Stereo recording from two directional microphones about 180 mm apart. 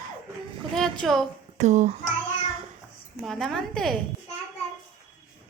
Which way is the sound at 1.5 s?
40° right (ahead or behind).